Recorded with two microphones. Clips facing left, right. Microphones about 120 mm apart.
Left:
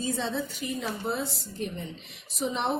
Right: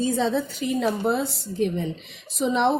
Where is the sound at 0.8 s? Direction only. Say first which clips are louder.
Right 8 dB; 70° right (ahead or behind).